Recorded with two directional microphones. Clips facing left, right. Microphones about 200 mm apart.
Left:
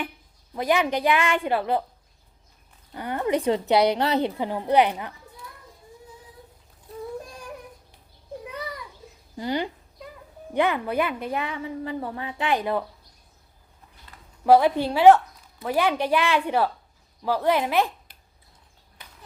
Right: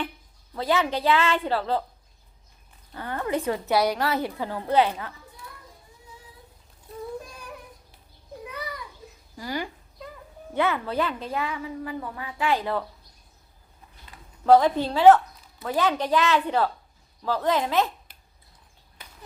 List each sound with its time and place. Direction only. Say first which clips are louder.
0.5 s a woman's voice: left 2 dB; 15° left (ahead or behind)
2.9 s a woman's voice: left 3 dB; 20° left (ahead or behind)
9.4 s a woman's voice: left 4 dB; 25° left (ahead or behind)
14.4 s a woman's voice: even; 10° left (ahead or behind)